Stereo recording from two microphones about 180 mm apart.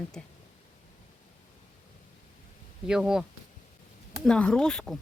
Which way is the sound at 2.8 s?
5° right (ahead or behind).